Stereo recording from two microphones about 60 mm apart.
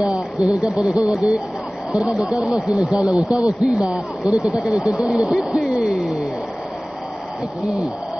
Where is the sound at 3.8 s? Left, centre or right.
Centre.